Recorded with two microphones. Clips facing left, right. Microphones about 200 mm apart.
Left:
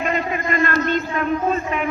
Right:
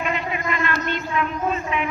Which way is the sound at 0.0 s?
45° left (ahead or behind).